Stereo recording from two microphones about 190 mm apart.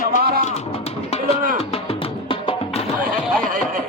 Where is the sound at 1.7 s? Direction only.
30° left (ahead or behind).